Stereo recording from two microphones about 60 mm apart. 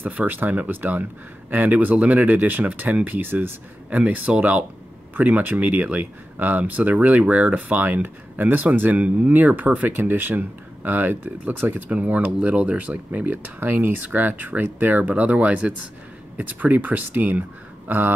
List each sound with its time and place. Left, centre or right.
0.0 s speech: right